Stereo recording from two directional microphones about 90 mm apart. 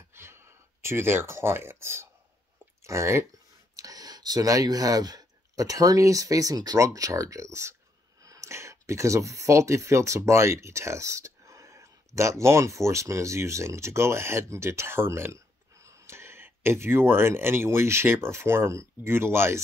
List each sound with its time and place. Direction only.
0.1 s a sound: 30° right (ahead or behind)
2.8 s speech: 30° right (ahead or behind)
3.7 s speech: 45° right (ahead or behind); by 19.6 s 30° right (ahead or behind)